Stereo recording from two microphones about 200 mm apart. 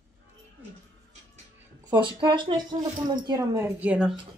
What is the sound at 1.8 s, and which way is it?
Speech, 25° right (ahead or behind).